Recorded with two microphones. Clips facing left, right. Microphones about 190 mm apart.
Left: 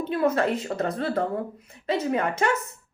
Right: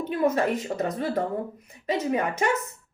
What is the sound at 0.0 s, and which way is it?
Speech, 15° right (ahead or behind).